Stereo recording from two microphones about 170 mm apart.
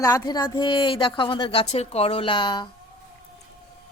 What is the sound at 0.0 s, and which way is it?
A woman's voice, 20° left (ahead or behind).